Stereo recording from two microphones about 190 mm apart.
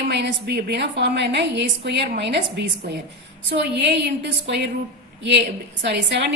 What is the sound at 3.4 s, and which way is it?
A woman's voice, 60° right (ahead or behind).